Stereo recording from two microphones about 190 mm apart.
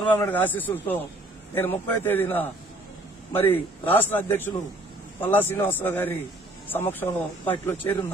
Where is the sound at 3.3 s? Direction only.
30° left (ahead or behind).